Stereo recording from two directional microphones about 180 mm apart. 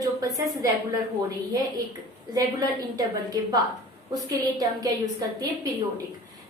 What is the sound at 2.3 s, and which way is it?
A woman's voice, 20° right (ahead or behind).